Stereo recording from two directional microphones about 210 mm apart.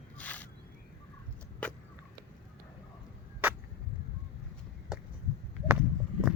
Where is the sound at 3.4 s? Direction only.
10° right (ahead or behind).